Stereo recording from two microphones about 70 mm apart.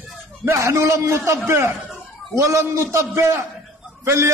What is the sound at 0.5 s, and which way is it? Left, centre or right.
A man's voice, right.